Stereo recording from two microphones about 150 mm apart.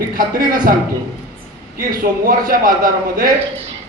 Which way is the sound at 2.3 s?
70° right (ahead or behind).